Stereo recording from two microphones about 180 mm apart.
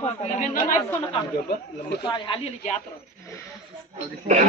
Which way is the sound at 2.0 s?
30° left (ahead or behind).